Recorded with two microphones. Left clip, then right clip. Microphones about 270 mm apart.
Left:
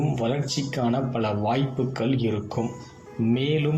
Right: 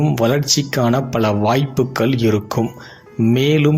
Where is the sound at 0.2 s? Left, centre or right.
Right.